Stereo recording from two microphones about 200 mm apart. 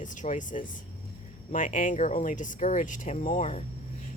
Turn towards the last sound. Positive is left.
turn(degrees=35)  # may be behind; listen again after turning